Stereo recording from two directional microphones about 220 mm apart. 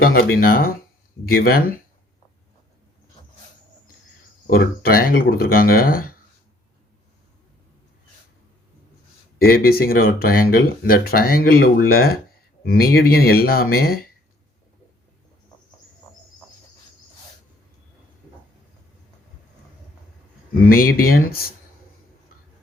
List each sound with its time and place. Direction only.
0.0 s a sound: 40° left (ahead or behind)
0.3 s speech: 40° left (ahead or behind)
4.4 s speech: 40° left (ahead or behind)
9.4 s speech: 45° left (ahead or behind)
20.7 s speech: 40° left (ahead or behind)